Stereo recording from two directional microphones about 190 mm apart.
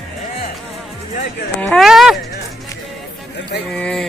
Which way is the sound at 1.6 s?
Centre (ahead or behind).